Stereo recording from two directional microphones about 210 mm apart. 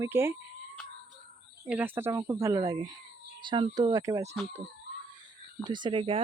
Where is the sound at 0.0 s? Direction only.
10° right (ahead or behind).